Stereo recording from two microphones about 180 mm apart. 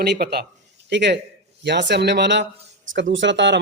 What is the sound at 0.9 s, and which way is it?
Speech, 75° right (ahead or behind).